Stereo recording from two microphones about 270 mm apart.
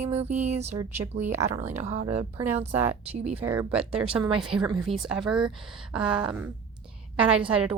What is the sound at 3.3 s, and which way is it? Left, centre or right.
Speech, centre.